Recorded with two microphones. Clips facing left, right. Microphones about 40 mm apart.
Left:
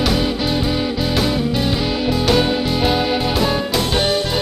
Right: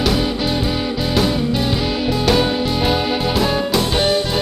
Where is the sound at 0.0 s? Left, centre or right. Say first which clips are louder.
Even; centre.